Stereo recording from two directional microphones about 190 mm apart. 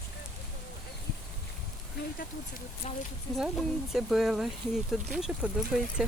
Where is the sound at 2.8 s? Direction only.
40° left (ahead or behind).